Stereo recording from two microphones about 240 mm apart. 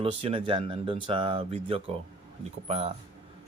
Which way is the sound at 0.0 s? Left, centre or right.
Right.